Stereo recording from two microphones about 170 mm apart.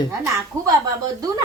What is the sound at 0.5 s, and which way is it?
Speech, 15° right (ahead or behind).